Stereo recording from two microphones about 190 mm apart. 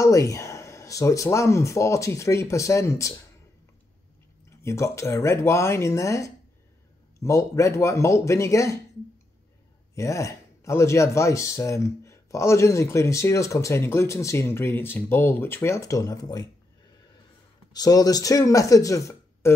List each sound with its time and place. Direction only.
0.0 s speech: 15° left (ahead or behind)
4.5 s speech: 15° left (ahead or behind)
9.9 s speech: 15° left (ahead or behind)
17.7 s speech: 20° left (ahead or behind)